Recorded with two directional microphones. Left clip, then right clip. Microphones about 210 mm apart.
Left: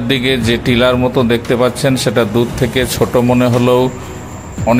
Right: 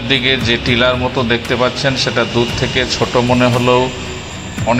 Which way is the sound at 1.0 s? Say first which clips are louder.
Left 2 dB; 35° left (ahead or behind).